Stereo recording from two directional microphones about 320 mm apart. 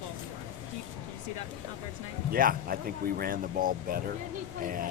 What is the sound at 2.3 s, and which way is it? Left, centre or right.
Speech, right.